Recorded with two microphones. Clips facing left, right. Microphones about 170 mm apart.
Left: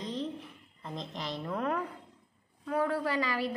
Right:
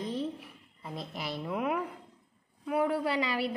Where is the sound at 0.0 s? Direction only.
10° right (ahead or behind).